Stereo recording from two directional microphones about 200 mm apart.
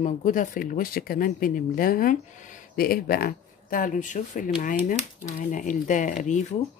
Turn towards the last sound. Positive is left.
turn(degrees=40)  # may be behind; listen again after turning